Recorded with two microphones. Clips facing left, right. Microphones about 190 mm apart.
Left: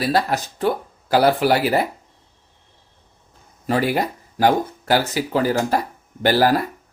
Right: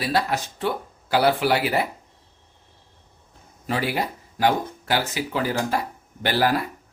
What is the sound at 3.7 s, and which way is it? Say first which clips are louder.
Speech: left 5 dB; 45° left (ahead or behind).